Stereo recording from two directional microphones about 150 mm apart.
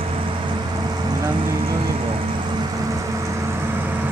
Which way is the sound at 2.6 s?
25° right (ahead or behind).